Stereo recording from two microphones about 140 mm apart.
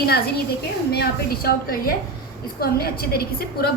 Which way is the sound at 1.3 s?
90° left.